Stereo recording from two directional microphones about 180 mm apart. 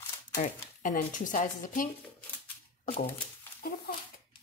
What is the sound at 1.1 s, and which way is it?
Speech, 45° left (ahead or behind).